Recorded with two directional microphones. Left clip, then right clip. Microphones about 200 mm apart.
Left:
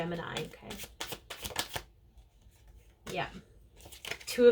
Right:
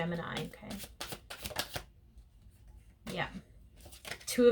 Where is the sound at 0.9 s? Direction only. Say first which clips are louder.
Left 4 dB; 25° left (ahead or behind).